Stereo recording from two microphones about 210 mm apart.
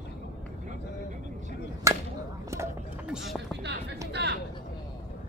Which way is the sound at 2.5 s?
15° right (ahead or behind).